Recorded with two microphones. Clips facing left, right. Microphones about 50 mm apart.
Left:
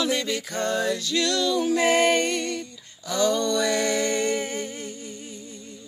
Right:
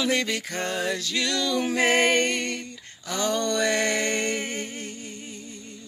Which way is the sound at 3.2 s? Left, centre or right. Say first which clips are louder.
Left 2 dB; right.